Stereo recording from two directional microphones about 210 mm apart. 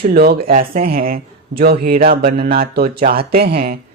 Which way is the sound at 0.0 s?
50° right (ahead or behind).